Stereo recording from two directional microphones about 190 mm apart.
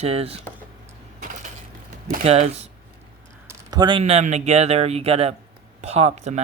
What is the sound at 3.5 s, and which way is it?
Speech, 20° right (ahead or behind).